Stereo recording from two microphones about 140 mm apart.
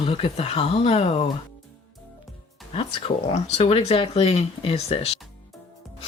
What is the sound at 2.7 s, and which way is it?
Speech, 45° left (ahead or behind).